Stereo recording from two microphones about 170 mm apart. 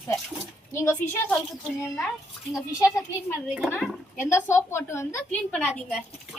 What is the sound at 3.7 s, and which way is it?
Speech, 10° left (ahead or behind).